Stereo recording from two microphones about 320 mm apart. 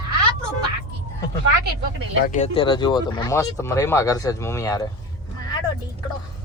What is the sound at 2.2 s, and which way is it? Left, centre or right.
Speech, left.